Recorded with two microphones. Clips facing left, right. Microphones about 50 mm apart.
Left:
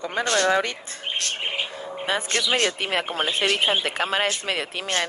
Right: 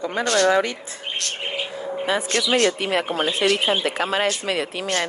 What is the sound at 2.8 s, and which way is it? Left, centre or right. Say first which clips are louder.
Speech: right 3 dB; left.